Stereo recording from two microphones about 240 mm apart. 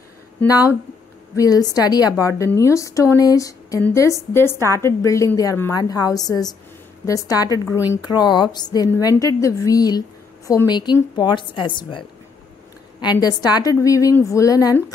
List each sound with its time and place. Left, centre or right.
0.4 s a woman's voice: centre
13.2 s a woman's voice: centre